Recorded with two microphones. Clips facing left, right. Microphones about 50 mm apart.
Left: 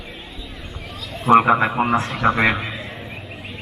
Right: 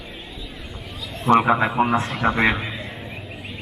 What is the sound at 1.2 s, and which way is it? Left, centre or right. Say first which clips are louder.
Speech: left 3 dB; centre.